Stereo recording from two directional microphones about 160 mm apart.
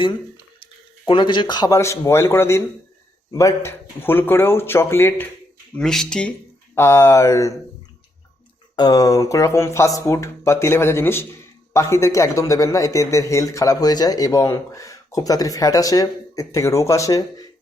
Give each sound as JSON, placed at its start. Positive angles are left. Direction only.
{"t": 1.0, "sound": "a man's voice", "side_deg": 30}
{"t": 6.7, "sound": "a man's voice", "side_deg": 15}
{"t": 8.7, "sound": "a man's voice", "side_deg": 25}